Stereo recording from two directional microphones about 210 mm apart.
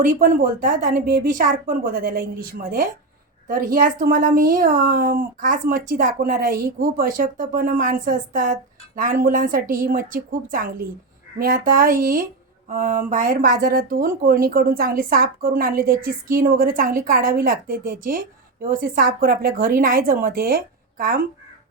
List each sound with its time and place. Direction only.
0.0 s a woman's voice: 40° right (ahead or behind)